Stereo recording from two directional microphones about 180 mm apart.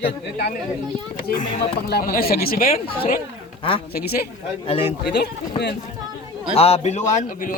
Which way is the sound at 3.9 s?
60° left (ahead or behind).